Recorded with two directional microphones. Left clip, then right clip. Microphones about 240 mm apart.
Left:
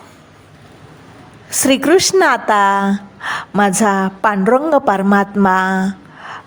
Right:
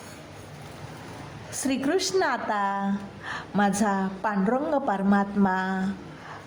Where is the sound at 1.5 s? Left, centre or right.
Left.